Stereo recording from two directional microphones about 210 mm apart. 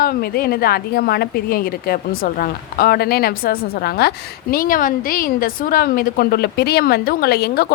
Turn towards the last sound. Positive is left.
turn(degrees=50)  # may be behind; listen again after turning